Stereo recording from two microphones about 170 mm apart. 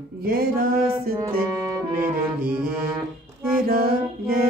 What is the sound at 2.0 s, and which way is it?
Music, 55° right (ahead or behind).